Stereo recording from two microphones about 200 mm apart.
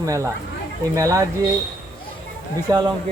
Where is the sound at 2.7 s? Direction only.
20° right (ahead or behind).